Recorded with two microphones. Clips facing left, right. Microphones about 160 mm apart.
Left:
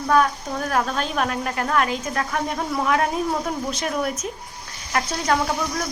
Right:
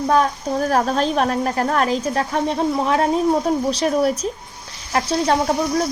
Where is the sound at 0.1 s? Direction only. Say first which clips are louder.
Right 1 dB; 35° right (ahead or behind).